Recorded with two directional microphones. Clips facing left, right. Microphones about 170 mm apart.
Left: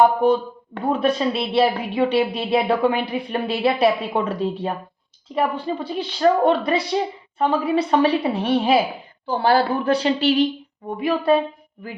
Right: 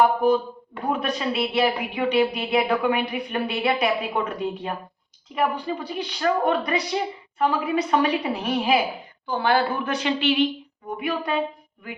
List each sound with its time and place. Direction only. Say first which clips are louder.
0.2 s a woman's voice: left 2 dB; 25° left (ahead or behind)